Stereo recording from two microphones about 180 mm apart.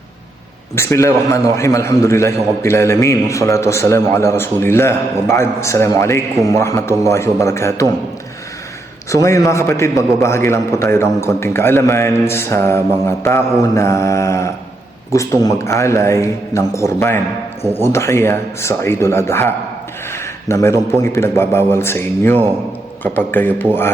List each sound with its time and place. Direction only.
0.8 s a man's voice: 15° left (ahead or behind)
9.0 s a man's voice: 15° left (ahead or behind)